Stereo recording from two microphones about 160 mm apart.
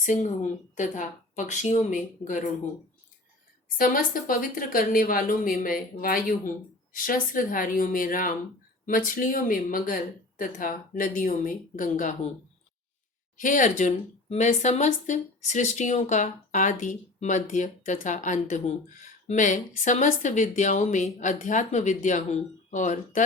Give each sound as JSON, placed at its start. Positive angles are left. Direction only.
{"t": 0.0, "sound": "a woman's voice", "side_deg": 50}
{"t": 3.8, "sound": "speech", "side_deg": 60}
{"t": 13.3, "sound": "a woman's voice", "side_deg": 55}